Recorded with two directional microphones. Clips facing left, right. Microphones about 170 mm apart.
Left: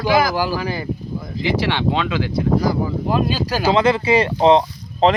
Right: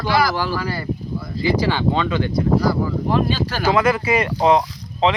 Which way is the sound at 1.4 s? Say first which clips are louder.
Right 1 dB; 90° left.